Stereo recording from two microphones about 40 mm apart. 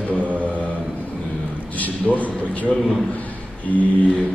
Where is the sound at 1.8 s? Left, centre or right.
Left.